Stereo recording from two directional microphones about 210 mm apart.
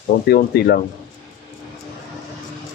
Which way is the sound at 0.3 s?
50° left (ahead or behind).